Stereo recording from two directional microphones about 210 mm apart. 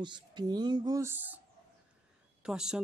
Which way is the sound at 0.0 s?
20° right (ahead or behind).